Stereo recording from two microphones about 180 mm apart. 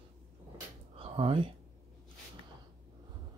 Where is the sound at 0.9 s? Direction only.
30° right (ahead or behind).